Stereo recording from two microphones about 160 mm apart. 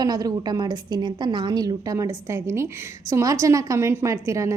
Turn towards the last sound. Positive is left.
turn(degrees=-20)  # may be behind; listen again after turning